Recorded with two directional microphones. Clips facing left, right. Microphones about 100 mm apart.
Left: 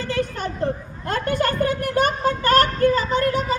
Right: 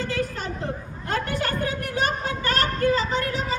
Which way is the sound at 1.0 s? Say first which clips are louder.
Left 5 dB; 55° left (ahead or behind).